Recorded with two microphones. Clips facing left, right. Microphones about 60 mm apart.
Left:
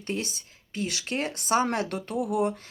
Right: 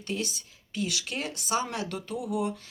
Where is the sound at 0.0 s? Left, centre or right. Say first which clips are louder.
Left 1 dB; left.